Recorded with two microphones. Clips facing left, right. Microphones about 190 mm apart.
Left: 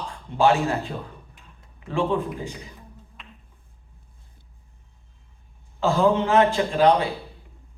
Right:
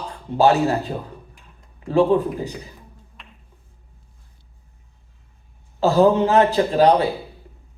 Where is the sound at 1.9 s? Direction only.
40° right (ahead or behind).